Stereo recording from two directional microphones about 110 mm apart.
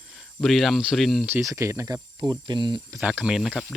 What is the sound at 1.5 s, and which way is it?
Speech, 25° right (ahead or behind).